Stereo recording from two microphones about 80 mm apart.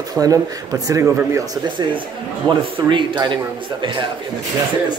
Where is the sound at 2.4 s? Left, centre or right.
Right.